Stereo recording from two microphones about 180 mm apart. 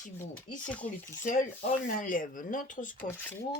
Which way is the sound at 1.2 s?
45° left (ahead or behind).